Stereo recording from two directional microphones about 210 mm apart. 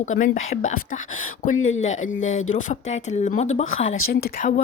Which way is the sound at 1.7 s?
35° left (ahead or behind).